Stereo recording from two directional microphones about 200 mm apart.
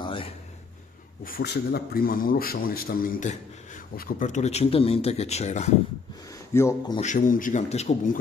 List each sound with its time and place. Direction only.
0.0 s a sound: 25° left (ahead or behind)
1.2 s a man's voice: 50° left (ahead or behind); by 5.8 s 35° left (ahead or behind)
6.5 s a man's voice: 15° left (ahead or behind)
7.0 s a man's voice: 40° left (ahead or behind)